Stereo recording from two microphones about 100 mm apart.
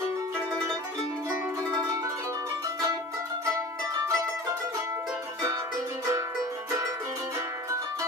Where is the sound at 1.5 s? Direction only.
35° right (ahead or behind).